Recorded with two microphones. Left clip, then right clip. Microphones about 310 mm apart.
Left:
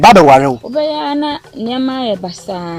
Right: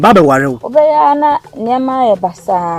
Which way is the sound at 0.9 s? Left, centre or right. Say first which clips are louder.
Right 8 dB; right.